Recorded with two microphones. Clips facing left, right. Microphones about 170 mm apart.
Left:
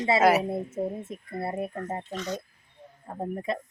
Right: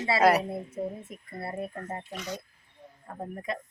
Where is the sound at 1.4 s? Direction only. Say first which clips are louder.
Left 4 dB; 25° left (ahead or behind).